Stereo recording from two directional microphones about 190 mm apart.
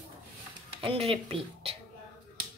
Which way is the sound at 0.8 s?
30° right (ahead or behind).